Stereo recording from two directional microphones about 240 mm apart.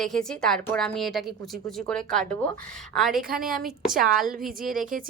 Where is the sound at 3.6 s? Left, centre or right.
Centre.